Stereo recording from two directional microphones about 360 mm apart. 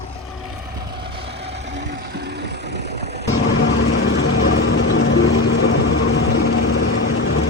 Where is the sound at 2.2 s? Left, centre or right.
Right.